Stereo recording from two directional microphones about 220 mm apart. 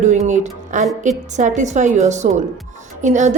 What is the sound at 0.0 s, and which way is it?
A woman's voice, 30° right (ahead or behind).